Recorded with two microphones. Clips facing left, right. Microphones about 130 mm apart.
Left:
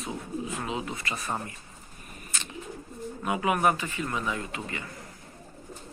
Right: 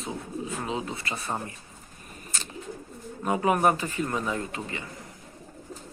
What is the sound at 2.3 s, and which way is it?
Bird, 40° right (ahead or behind).